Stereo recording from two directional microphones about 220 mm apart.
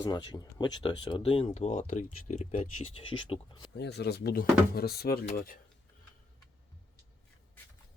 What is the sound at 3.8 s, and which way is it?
Speech, 50° left (ahead or behind).